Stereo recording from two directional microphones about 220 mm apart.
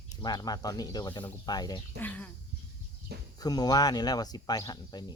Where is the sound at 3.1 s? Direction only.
45° right (ahead or behind).